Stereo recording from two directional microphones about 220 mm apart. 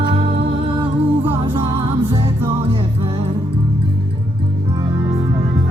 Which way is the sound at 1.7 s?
25° right (ahead or behind).